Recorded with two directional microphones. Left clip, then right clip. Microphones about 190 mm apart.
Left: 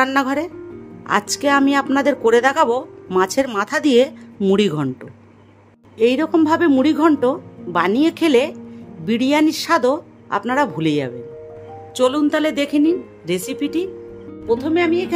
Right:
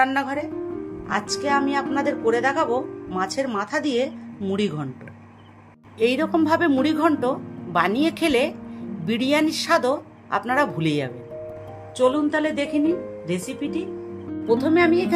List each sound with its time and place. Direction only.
0.0 s a woman's voice: 60° left (ahead or behind)
5.9 s speech: 25° left (ahead or behind)
12.0 s speech: 50° left (ahead or behind)
14.6 s speech: 5° left (ahead or behind)